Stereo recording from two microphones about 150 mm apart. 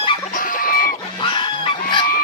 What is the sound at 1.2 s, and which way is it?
Goose, 35° left (ahead or behind).